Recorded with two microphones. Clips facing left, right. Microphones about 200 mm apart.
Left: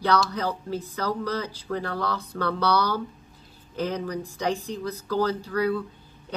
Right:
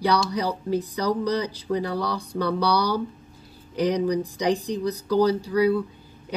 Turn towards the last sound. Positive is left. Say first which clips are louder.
# right 5 dB
turn(degrees=-15)  # may be behind; listen again after turning